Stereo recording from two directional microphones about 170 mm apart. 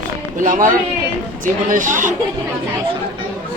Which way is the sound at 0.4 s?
50° right (ahead or behind).